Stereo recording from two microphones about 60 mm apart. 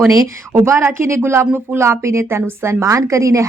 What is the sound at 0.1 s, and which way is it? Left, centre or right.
Speech, right.